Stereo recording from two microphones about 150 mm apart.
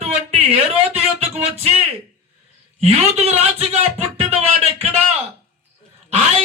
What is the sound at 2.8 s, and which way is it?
A man's voice, 45° right (ahead or behind).